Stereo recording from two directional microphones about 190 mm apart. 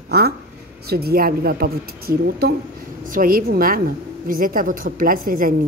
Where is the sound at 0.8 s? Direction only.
55° right (ahead or behind).